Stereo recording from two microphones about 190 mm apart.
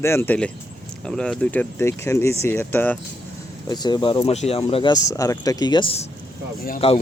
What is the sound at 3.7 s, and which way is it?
Speech, 20° left (ahead or behind).